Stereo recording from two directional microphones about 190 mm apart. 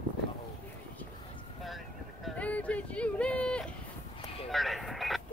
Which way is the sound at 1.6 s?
Centre (ahead or behind).